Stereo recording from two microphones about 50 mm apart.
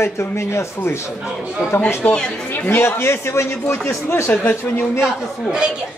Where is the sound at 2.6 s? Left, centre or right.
Left.